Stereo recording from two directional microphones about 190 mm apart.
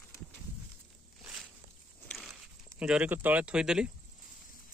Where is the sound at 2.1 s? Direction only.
Centre (ahead or behind).